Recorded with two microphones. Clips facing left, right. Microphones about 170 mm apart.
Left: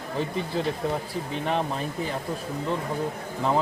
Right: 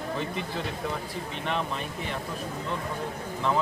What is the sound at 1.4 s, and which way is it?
Speech, 40° left (ahead or behind).